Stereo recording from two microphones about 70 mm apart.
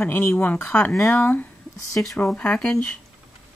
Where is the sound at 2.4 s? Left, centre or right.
Centre.